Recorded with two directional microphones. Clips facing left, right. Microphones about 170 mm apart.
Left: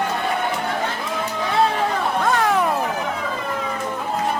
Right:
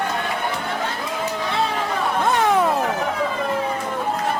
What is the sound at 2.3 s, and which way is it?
Music, 20° right (ahead or behind).